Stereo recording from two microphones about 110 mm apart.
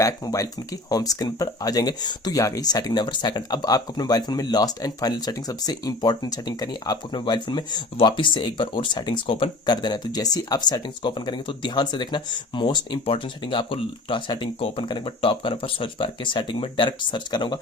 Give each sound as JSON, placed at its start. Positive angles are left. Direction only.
{"t": 0.0, "sound": "speech", "side_deg": 30}